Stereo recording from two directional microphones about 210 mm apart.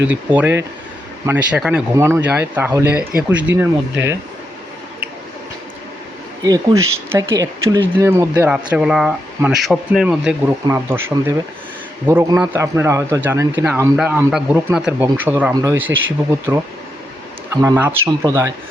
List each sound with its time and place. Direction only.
0.1 s speech: 10° right (ahead or behind)
6.4 s speech: 15° right (ahead or behind)
17.5 s speech: 15° right (ahead or behind)